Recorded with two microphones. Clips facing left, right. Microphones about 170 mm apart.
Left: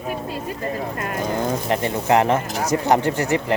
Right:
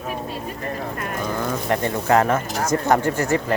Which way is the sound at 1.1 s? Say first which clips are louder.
Left 3 dB; 25° left (ahead or behind).